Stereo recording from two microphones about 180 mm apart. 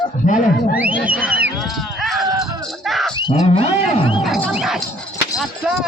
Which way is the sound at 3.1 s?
25° left (ahead or behind).